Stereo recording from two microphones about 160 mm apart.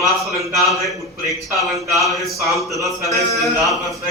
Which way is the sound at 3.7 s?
Centre (ahead or behind).